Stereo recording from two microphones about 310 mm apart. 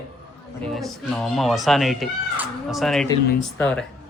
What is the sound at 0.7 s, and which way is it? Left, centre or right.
Speech, centre.